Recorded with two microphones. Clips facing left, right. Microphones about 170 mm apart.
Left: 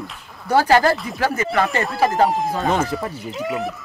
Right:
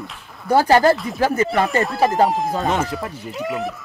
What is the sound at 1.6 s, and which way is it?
Speech, centre (ahead or behind).